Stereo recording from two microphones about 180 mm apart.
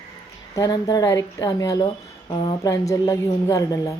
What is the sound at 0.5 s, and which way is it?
A woman's voice, 20° left (ahead or behind).